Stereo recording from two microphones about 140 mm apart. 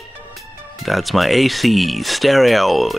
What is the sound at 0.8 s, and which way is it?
Speech, centre (ahead or behind).